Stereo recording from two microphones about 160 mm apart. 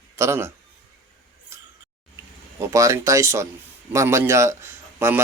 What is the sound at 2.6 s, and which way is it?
A man's voice, 20° right (ahead or behind).